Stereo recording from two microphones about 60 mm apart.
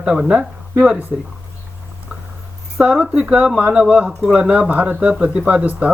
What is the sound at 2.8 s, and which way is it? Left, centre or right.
Speech, centre.